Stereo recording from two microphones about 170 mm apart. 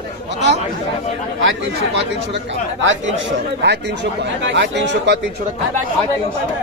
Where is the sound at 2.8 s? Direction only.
90° right.